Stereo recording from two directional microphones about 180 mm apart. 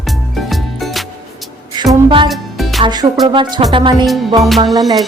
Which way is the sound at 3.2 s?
25° right (ahead or behind).